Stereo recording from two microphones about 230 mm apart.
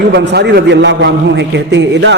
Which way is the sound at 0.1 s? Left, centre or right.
Right.